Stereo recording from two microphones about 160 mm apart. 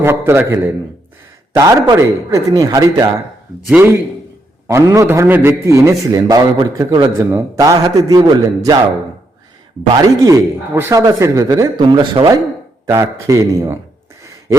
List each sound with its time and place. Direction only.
0.0 s a man's voice: 15° right (ahead or behind)
3.7 s a man's voice: 15° right (ahead or behind)
10.2 s a man's voice: 20° right (ahead or behind)